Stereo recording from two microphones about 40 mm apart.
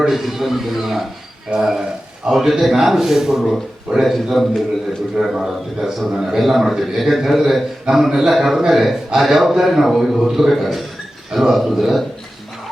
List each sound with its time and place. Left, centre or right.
0.1 s a man's voice: centre
1.5 s speech: right
2.3 s a man's voice: centre
5.1 s a man's voice: centre
6.4 s a man's voice: centre